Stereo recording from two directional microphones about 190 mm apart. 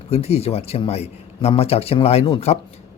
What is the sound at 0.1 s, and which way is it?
A man's voice, 35° left (ahead or behind).